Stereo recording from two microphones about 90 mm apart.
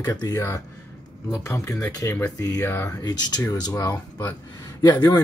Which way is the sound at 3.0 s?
50° left (ahead or behind).